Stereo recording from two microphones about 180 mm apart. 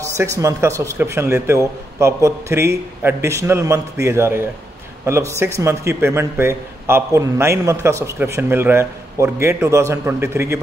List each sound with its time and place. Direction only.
0.0 s speech: 15° right (ahead or behind)